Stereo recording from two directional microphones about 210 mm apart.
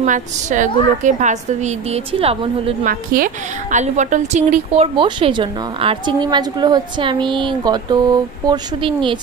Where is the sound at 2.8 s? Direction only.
40° right (ahead or behind).